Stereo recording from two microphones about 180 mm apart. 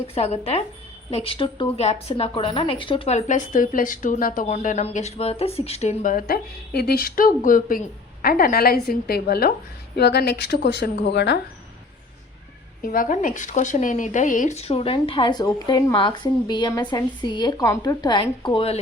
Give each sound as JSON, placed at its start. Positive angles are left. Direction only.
{"t": 0.1, "sound": "a woman's voice", "side_deg": 35}
{"t": 12.8, "sound": "speech", "side_deg": 50}